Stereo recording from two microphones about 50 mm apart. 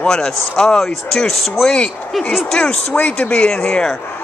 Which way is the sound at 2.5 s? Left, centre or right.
Centre.